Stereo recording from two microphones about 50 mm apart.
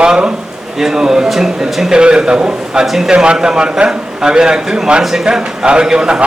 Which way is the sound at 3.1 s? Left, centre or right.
Centre.